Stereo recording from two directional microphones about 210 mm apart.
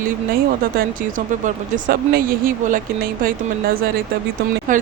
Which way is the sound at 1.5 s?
40° right (ahead or behind).